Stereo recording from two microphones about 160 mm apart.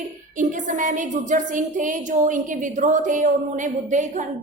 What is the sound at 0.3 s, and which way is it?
A woman's voice, 55° right (ahead or behind).